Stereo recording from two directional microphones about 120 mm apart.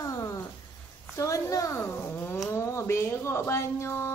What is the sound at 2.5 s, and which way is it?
A child's voice, 20° left (ahead or behind).